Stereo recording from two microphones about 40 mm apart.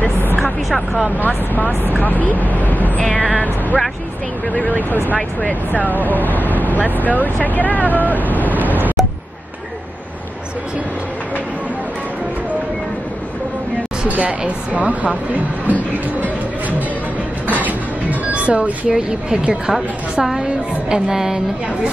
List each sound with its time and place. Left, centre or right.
0.4 s speech: centre
2.0 s speech: left
3.0 s speech: left
4.6 s speech: left
5.7 s speech: left
8.2 s waves: left
14.0 s speech: right
18.3 s a sound: right
18.9 s speech: centre